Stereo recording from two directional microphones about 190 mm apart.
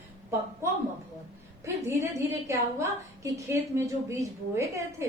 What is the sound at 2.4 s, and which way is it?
A woman's voice, 15° right (ahead or behind).